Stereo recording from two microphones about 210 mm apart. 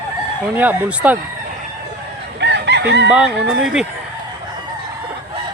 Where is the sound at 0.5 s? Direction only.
10° right (ahead or behind).